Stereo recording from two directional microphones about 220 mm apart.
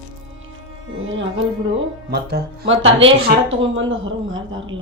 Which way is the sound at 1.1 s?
60° right (ahead or behind).